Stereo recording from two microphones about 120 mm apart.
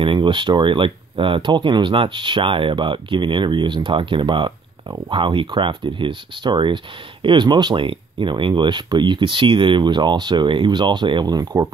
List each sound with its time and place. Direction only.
0.0 s speech: 45° right (ahead or behind)